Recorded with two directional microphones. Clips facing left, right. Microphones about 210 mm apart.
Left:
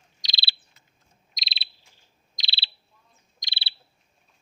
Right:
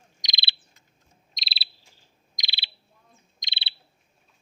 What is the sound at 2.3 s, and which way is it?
Bird, 15° right (ahead or behind).